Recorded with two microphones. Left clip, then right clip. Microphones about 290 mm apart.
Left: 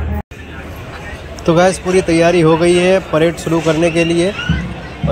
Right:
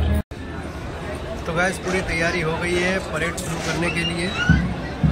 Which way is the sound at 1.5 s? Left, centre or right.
Centre.